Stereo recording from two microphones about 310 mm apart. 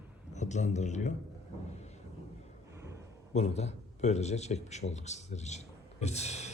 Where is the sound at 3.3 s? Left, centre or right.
Left.